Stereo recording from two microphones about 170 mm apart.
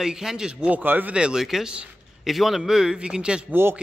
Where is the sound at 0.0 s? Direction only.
5° right (ahead or behind).